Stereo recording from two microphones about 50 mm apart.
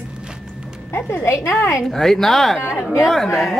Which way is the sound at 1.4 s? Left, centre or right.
Left.